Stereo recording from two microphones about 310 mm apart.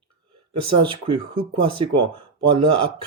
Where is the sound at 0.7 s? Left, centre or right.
Centre.